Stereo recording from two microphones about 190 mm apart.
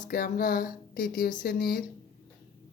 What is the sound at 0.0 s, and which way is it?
Speech, 50° left (ahead or behind).